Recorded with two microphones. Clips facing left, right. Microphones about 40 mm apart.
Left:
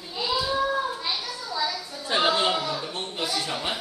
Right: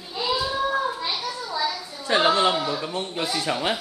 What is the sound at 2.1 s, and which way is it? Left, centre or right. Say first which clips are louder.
Speech: right 3 dB; right.